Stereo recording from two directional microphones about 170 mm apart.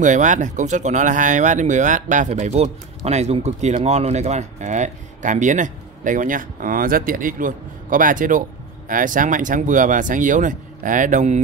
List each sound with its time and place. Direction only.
0.0 s speech: 45° right (ahead or behind)